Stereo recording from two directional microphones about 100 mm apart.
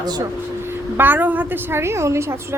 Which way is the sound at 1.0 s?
20° right (ahead or behind).